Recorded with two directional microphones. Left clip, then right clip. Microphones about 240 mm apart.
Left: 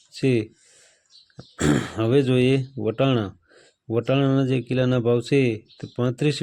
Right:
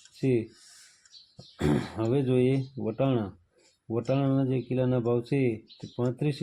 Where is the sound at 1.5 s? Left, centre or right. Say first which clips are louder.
Left 6 dB; left.